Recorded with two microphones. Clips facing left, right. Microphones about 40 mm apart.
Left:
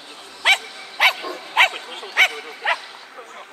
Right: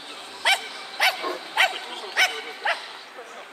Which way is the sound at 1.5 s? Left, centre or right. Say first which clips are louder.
Left 5 dB; left.